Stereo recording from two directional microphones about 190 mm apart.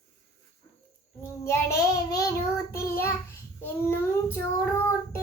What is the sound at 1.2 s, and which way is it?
Child singing, 15° left (ahead or behind).